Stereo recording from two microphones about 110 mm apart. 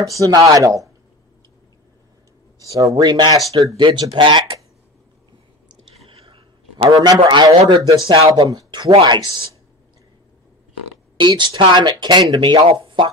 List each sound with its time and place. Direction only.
0.0 s speech: 30° right (ahead or behind)
2.6 s speech: 30° right (ahead or behind); by 4.6 s 50° right (ahead or behind)
6.0 s a sound: 60° right (ahead or behind)
6.9 s speech: 40° right (ahead or behind)
8.1 s speech: 55° right (ahead or behind)
8.5 s speech: 40° right (ahead or behind)
11.1 s speech: 45° right (ahead or behind)